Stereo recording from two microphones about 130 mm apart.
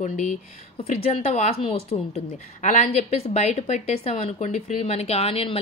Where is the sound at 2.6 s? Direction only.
70° left (ahead or behind).